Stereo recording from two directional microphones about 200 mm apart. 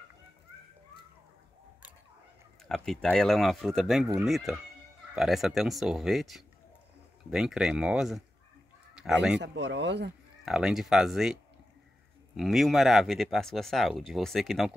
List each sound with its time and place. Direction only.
2.7 s speech: 5° left (ahead or behind)
9.4 s speech: 60° right (ahead or behind)
10.4 s speech: 5° right (ahead or behind)
12.4 s speech: centre (ahead or behind)